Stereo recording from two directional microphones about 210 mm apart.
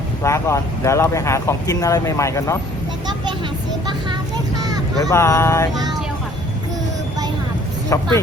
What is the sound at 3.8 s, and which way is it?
Vehicle, 20° right (ahead or behind).